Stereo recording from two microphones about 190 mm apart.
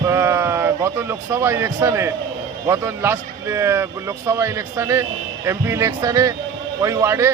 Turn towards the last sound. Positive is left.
turn(degrees=-15)  # may be behind; listen again after turning